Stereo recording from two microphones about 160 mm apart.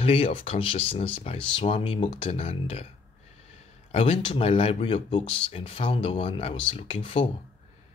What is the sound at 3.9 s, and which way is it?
Speech, 35° left (ahead or behind).